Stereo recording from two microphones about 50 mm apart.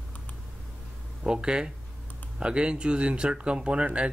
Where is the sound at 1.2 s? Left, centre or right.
Centre.